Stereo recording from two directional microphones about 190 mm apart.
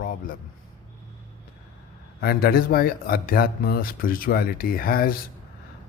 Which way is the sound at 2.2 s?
55° left (ahead or behind).